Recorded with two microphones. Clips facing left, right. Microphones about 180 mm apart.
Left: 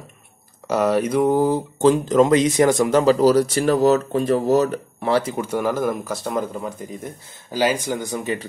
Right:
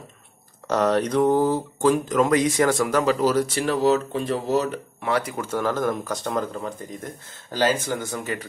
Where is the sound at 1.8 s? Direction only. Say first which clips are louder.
Left 5 dB; 25° left (ahead or behind).